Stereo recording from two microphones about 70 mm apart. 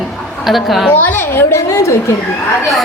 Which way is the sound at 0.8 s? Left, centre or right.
Left.